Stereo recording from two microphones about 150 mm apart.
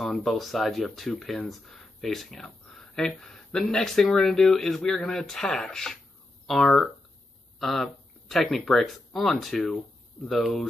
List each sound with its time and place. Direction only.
0.0 s speech: centre (ahead or behind)